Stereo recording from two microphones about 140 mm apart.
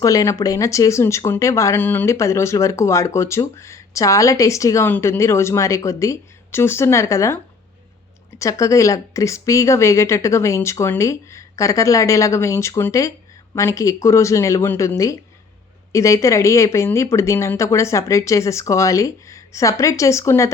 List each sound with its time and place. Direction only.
0.0 s speech: 25° left (ahead or behind)
8.4 s speech: 20° left (ahead or behind)